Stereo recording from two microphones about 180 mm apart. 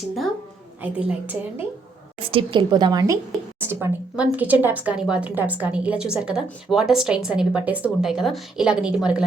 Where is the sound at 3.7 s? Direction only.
10° right (ahead or behind).